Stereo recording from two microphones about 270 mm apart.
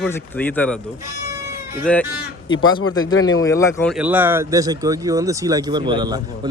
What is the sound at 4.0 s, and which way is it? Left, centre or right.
Speech, centre.